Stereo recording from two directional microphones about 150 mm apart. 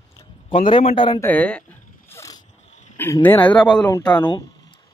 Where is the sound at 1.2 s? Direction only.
10° left (ahead or behind).